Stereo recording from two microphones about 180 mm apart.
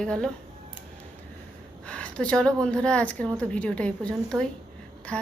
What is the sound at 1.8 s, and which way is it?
A woman's voice, 5° left (ahead or behind).